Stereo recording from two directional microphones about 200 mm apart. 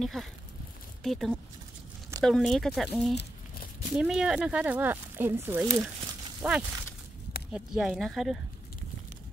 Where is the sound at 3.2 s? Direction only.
45° left (ahead or behind).